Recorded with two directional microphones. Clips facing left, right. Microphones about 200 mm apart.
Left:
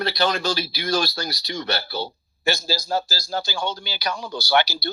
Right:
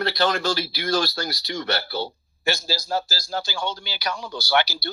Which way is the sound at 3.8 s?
40° left (ahead or behind).